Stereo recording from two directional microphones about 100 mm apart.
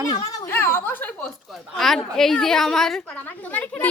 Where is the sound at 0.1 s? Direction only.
40° left (ahead or behind).